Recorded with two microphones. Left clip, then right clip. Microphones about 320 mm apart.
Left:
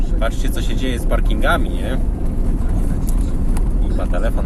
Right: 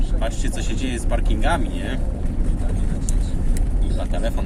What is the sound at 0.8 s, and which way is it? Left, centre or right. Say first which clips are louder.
Speech: left 5 dB; centre.